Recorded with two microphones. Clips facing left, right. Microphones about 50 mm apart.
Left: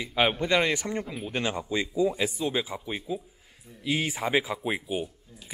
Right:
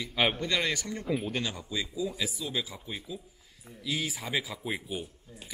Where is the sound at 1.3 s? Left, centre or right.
Left.